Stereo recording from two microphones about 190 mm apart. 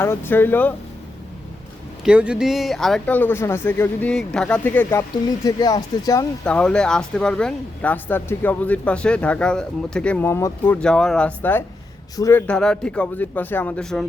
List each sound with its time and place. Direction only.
0.0 s speech: 10° left (ahead or behind)
2.0 s speech: 5° right (ahead or behind); by 6.2 s 20° left (ahead or behind)
6.4 s speech: 5° left (ahead or behind)
12.5 s speech: 5° left (ahead or behind)